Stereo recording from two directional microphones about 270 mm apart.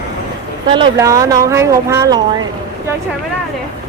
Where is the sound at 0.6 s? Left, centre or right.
Centre.